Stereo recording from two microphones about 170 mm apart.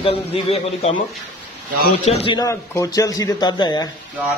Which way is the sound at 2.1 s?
35° left (ahead or behind).